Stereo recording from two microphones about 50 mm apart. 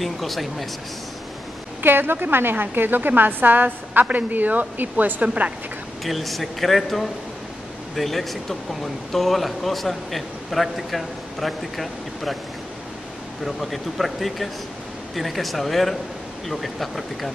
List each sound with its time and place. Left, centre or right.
0.0 s speech: centre
1.8 s a woman's voice: right
6.0 s speech: centre
13.4 s speech: centre